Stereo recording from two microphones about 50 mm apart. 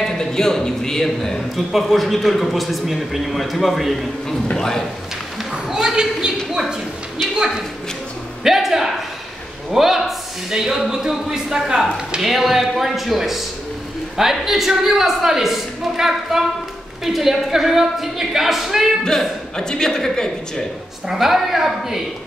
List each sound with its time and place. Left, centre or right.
0.0 s a man's voice: centre
1.7 s a man's voice: centre
4.6 s speech: centre
5.5 s a sound: centre
7.3 s a sound: centre
9.7 s a man's voice: centre
14.4 s a woman's voice: centre
19.0 s speech: centre
21.1 s a woman's voice: centre